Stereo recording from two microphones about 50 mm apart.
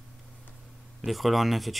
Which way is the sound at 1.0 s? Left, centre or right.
Centre.